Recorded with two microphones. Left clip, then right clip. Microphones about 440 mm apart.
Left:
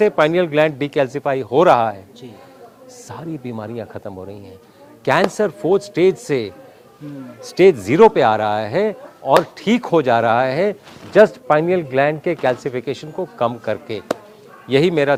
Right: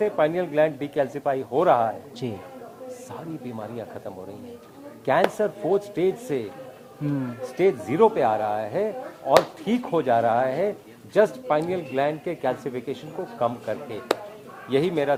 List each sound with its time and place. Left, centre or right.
0.0 s speech: left
3.1 s speech: left
7.5 s speech: left